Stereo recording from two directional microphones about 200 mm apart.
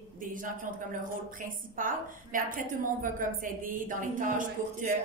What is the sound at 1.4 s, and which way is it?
A woman's voice, 40° right (ahead or behind).